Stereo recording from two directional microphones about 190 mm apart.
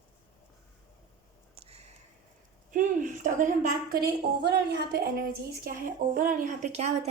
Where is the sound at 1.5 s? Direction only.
35° right (ahead or behind).